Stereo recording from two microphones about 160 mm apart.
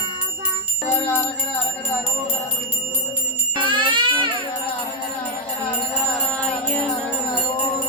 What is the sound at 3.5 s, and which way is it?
Music, 30° right (ahead or behind).